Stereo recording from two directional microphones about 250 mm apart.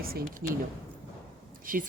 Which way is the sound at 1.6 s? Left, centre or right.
Right.